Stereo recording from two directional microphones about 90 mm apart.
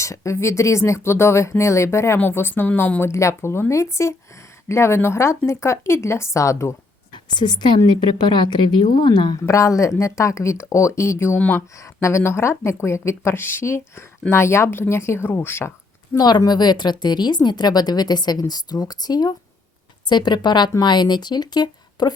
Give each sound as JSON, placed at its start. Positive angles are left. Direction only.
{"t": 0.0, "sound": "speech", "side_deg": 35}
{"t": 7.1, "sound": "a woman's voice", "side_deg": 55}
{"t": 9.5, "sound": "speech", "side_deg": 35}
{"t": 16.1, "sound": "a woman's voice", "side_deg": 50}